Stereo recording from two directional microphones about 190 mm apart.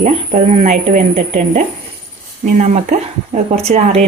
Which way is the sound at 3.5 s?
35° right (ahead or behind).